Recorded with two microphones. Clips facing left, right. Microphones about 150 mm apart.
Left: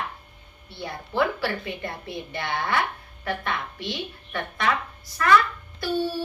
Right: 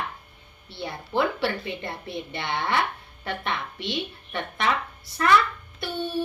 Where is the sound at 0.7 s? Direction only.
25° right (ahead or behind).